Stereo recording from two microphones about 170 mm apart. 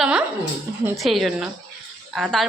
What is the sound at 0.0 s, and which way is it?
Dog, 5° right (ahead or behind).